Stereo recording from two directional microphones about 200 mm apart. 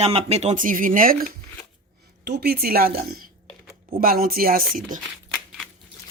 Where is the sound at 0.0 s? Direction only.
30° right (ahead or behind).